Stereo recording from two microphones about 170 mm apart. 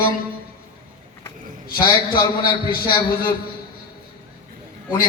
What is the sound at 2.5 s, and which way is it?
Speech, 30° left (ahead or behind).